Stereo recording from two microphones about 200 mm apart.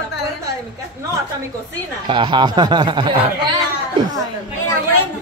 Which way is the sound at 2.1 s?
25° right (ahead or behind).